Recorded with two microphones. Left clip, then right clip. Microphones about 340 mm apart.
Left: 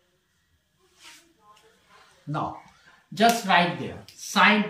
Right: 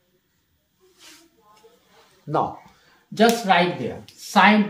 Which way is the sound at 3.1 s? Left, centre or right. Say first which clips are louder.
Right 2 dB; centre.